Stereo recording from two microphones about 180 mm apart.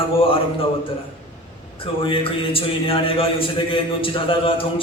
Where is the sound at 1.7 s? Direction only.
30° left (ahead or behind).